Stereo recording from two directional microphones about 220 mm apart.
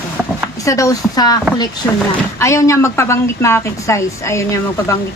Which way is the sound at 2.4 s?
15° left (ahead or behind).